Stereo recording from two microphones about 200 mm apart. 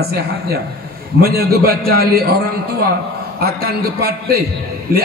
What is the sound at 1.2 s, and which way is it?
A man's voice, 50° right (ahead or behind).